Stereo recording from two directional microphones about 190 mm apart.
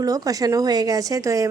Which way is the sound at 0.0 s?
20° right (ahead or behind).